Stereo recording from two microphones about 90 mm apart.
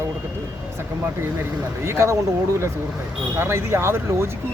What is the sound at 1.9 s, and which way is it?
Speech, 30° right (ahead or behind).